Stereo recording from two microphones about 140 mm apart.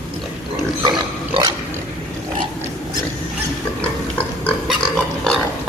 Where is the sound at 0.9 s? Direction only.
35° right (ahead or behind).